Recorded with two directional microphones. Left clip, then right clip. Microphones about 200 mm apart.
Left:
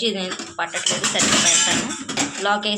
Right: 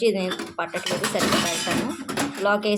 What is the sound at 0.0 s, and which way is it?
Music, 45° right (ahead or behind).